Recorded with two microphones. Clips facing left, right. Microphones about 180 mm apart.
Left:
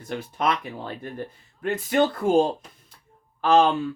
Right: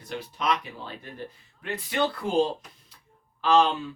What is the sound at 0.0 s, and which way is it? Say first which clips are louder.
Speech: left 5 dB; 50° left (ahead or behind).